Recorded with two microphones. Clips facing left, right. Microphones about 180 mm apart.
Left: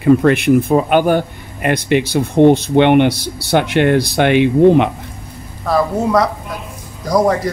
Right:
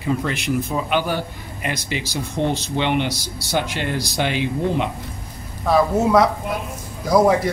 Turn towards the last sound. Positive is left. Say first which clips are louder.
# left 1 dB
turn(degrees=-5)  # may be behind; listen again after turning